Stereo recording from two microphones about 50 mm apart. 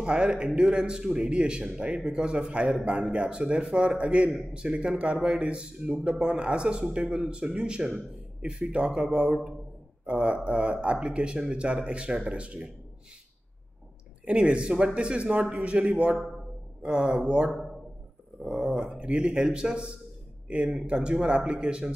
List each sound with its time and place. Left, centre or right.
0.0 s a man's voice: centre
14.2 s a man's voice: right
18.5 s a man's voice: centre